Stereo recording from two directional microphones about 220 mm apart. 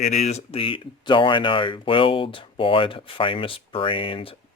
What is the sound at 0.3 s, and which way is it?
Speech, 30° left (ahead or behind).